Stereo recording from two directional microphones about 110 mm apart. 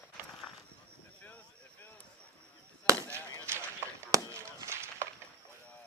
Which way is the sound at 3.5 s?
20° right (ahead or behind).